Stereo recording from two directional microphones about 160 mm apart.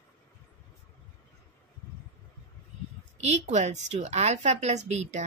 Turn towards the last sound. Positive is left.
turn(degrees=-45)  # may be behind; listen again after turning